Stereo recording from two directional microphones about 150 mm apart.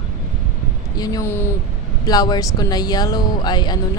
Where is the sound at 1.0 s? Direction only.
25° left (ahead or behind).